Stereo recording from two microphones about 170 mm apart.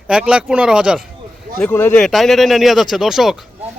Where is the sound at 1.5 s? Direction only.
10° left (ahead or behind).